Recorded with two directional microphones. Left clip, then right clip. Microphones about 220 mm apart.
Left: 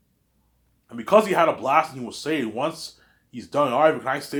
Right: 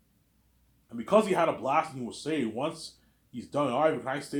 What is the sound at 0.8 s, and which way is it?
Speech, 25° left (ahead or behind).